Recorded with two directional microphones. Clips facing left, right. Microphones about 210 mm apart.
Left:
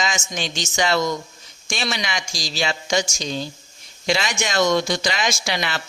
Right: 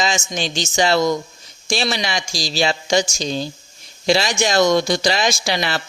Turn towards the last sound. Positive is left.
turn(degrees=-35)  # may be behind; listen again after turning